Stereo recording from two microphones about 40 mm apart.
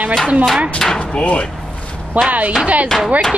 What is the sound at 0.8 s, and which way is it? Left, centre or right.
Speech, centre.